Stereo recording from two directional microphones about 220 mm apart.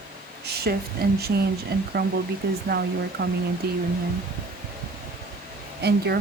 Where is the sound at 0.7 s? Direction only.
45° right (ahead or behind).